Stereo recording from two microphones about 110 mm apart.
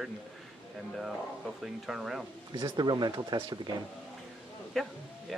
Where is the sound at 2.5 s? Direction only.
40° right (ahead or behind).